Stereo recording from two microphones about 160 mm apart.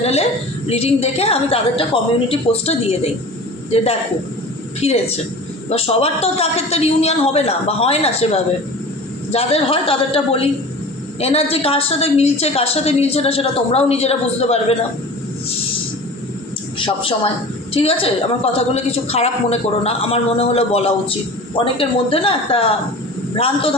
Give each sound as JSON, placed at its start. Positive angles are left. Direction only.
{"t": 0.0, "sound": "a woman's voice", "side_deg": 40}
{"t": 4.8, "sound": "a woman's voice", "side_deg": 40}
{"t": 16.7, "sound": "a woman's voice", "side_deg": 35}